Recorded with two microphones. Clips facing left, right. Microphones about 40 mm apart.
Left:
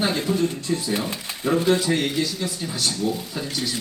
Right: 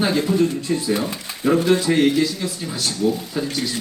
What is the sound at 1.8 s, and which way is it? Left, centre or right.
A man's voice, centre.